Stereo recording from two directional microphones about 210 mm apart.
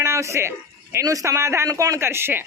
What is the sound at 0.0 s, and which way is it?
A man's voice, 15° right (ahead or behind).